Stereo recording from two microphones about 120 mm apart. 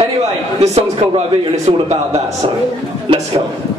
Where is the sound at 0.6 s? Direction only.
55° right (ahead or behind).